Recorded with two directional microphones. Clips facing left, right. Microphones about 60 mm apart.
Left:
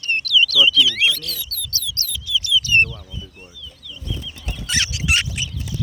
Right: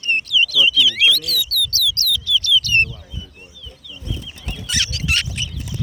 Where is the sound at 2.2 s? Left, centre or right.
Centre.